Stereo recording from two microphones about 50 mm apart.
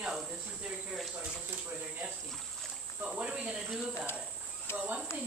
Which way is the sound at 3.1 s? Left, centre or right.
Right.